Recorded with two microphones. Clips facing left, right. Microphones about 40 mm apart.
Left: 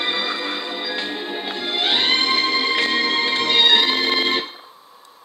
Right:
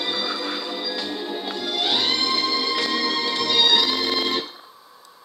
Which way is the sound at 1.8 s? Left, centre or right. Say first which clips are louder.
Left 4 dB; left.